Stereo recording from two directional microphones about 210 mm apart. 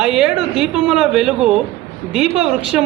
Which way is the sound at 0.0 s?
5° right (ahead or behind).